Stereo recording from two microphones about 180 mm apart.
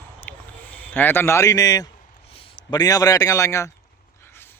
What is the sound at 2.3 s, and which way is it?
A man's voice, 30° left (ahead or behind).